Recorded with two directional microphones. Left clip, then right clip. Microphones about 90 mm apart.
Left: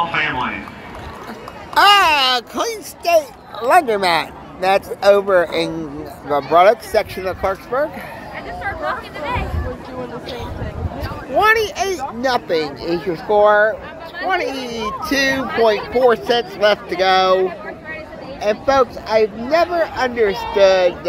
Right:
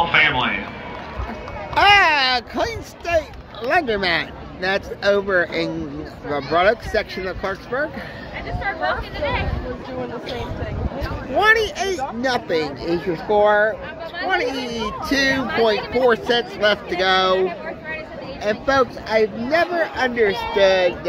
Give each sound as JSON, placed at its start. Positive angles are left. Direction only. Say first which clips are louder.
{"t": 0.1, "sound": "a sound", "louder": "right 3 dB", "side_deg": 20}
{"t": 1.7, "sound": "a sound", "louder": "left 2 dB", "side_deg": 10}
{"t": 2.5, "sound": "speech", "louder": "left 2 dB", "side_deg": 0}
{"t": 8.8, "sound": "speech", "louder": "right 2 dB", "side_deg": -90}
{"t": 11.3, "sound": "speech", "louder": "left 2 dB", "side_deg": -5}
{"t": 18.4, "sound": "speech", "louder": "left 3 dB", "side_deg": -10}